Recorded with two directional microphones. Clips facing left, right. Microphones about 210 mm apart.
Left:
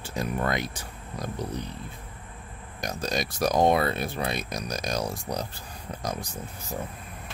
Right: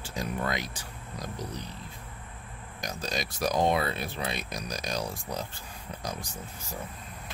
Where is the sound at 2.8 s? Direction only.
50° left (ahead or behind).